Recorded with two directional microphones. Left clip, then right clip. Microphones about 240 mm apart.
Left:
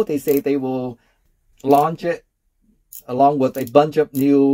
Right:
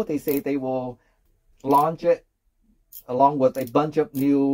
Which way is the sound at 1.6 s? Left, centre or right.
Left.